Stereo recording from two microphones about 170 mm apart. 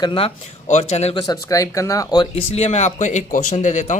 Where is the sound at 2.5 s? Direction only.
40° left (ahead or behind).